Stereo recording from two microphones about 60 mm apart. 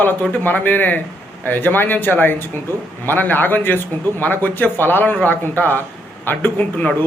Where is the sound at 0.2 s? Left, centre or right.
Left.